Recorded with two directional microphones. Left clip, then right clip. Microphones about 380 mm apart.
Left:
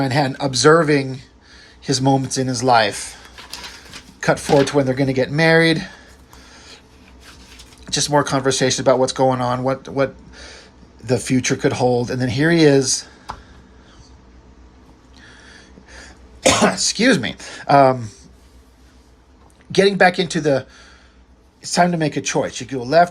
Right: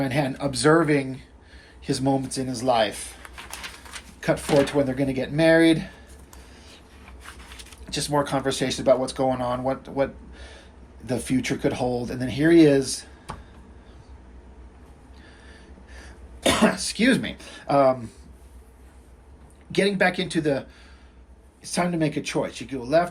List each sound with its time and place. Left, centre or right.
0.0 s speech: centre
4.2 s speech: centre
7.9 s speech: centre
16.4 s speech: centre
19.7 s speech: centre